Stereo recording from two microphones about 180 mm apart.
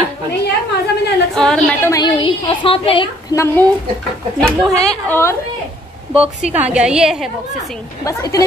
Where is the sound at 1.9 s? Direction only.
25° left (ahead or behind).